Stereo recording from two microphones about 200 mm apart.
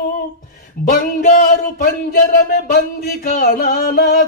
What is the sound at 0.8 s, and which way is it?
Mantra, 50° left (ahead or behind).